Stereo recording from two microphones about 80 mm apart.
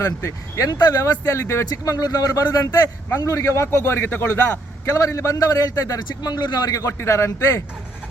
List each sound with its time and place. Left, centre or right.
0.0 s speech: left
4.9 s a man's voice: left
6.0 s a man's voice: left